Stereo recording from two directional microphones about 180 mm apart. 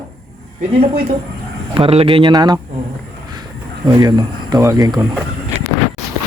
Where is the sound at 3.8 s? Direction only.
20° right (ahead or behind).